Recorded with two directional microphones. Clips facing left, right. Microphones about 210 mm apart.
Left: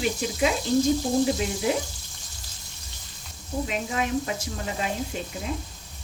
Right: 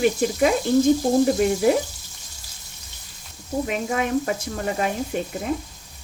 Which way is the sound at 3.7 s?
55° right (ahead or behind).